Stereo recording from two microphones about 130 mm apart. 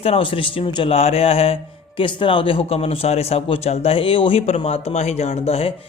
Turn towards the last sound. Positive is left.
turn(degrees=50)  # may be behind; listen again after turning